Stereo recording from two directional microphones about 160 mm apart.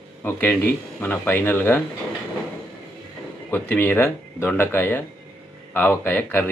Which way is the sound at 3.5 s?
10° left (ahead or behind).